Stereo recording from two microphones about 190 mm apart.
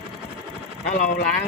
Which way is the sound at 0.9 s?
50° left (ahead or behind).